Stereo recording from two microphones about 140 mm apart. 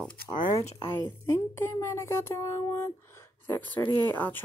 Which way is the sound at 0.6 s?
50° left (ahead or behind).